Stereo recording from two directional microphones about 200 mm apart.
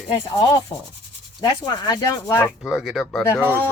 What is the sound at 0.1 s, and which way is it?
Rub, 20° left (ahead or behind).